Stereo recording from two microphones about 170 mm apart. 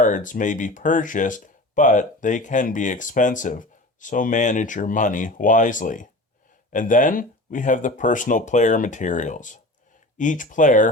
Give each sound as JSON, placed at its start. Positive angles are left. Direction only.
{"t": 0.0, "sound": "speech", "side_deg": 50}